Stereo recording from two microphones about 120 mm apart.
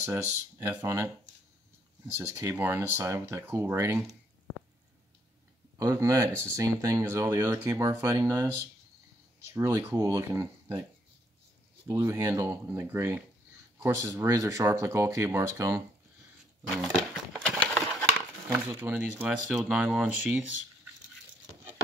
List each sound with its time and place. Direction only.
0.0 s speech: 20° right (ahead or behind)
2.2 s speech: 20° right (ahead or behind)
5.8 s speech: 25° right (ahead or behind)
9.5 s speech: 20° right (ahead or behind)
11.9 s speech: 25° right (ahead or behind)
16.7 s a sound: centre (ahead or behind)
18.5 s speech: 20° right (ahead or behind)